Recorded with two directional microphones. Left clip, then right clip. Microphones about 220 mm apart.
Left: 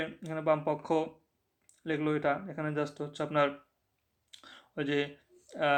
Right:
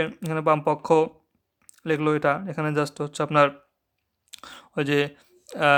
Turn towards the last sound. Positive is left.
turn(degrees=-35)  # may be behind; listen again after turning